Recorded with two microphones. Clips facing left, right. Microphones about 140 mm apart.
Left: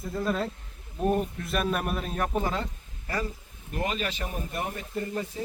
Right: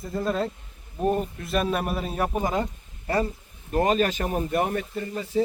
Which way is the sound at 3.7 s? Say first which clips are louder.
Right 9 dB; 40° right (ahead or behind).